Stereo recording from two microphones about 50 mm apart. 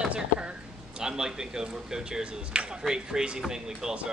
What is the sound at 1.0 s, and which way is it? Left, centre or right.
A woman's voice, centre.